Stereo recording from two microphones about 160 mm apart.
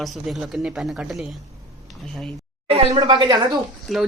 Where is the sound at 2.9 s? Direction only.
25° right (ahead or behind).